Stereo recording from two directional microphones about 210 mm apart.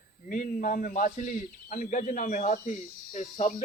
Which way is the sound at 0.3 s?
40° left (ahead or behind).